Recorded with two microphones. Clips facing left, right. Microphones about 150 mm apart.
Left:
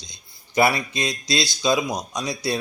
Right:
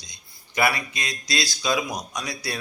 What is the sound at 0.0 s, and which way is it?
Speech, 30° left (ahead or behind).